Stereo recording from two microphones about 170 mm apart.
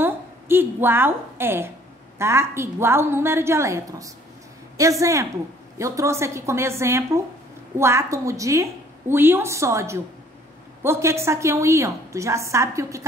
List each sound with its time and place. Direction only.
0.0 s a woman's voice: 15° right (ahead or behind)